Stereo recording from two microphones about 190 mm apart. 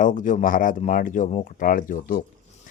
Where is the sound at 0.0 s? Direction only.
45° left (ahead or behind).